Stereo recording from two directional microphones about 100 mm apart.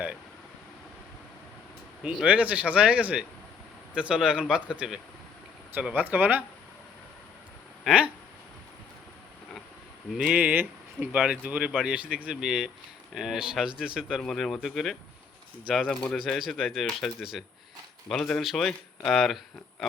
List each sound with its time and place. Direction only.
2.0 s speech: 10° right (ahead or behind)
6.0 s speech: 20° right (ahead or behind)
7.9 s speech: 10° right (ahead or behind)
10.1 s speech: 5° right (ahead or behind)
14.2 s speech: 5° left (ahead or behind)